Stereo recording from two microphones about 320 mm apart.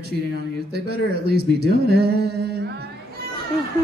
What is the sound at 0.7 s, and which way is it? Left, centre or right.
Speech, right.